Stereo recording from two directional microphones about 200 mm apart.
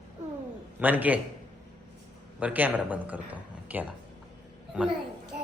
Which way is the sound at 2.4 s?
10° right (ahead or behind).